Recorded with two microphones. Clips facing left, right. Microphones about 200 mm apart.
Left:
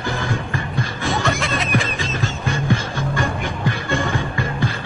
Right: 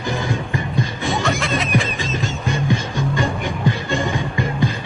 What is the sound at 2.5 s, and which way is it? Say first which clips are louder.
Music: even; 15° right (ahead or behind).